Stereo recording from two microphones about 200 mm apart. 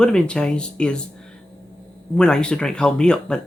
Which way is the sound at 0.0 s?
5° left (ahead or behind).